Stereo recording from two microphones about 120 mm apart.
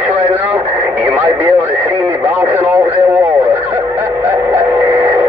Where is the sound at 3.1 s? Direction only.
15° right (ahead or behind).